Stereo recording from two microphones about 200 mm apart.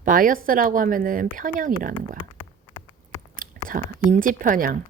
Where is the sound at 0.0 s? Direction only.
45° right (ahead or behind).